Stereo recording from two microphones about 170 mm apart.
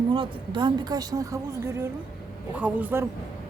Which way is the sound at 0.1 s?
30° right (ahead or behind).